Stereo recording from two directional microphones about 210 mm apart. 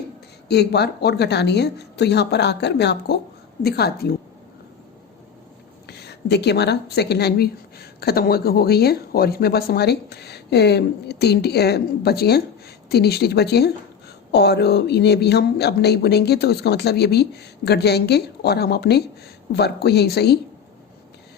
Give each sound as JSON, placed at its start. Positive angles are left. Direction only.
{"t": 0.4, "sound": "a woman's voice", "side_deg": 50}
{"t": 5.9, "sound": "a woman's voice", "side_deg": 50}